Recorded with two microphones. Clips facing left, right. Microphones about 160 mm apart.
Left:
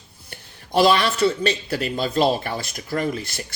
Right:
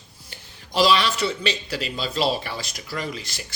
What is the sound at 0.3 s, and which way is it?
A man's voice, 55° left (ahead or behind).